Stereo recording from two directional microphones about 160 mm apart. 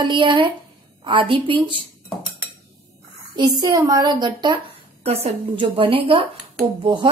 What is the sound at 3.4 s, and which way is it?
A woman's voice, 25° right (ahead or behind).